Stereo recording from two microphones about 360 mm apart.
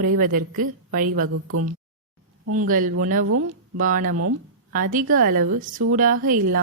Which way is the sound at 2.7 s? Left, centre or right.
Right.